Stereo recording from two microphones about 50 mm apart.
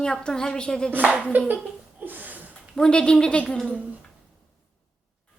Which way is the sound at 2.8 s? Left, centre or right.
Centre.